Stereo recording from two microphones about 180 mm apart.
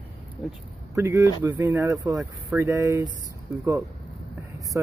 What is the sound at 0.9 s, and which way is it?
Speech, 15° right (ahead or behind).